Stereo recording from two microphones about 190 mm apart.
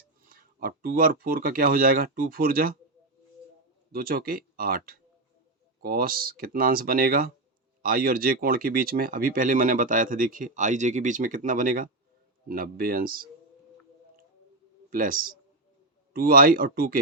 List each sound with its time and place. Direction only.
0.3 s speech: 50° right (ahead or behind)
3.9 s speech: 50° right (ahead or behind)
14.8 s a man's voice: 45° right (ahead or behind)